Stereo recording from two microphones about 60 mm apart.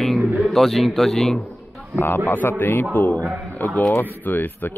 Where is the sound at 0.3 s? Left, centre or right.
Centre.